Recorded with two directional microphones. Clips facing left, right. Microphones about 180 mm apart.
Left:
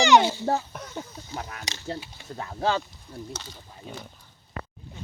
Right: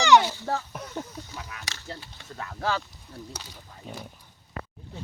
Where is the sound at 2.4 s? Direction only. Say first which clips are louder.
Left 3 dB; 25° left (ahead or behind).